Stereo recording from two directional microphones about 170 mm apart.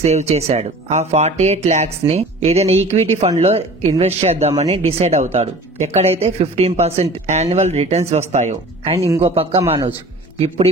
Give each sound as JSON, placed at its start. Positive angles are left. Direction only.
{"t": 0.0, "sound": "speech", "side_deg": -40}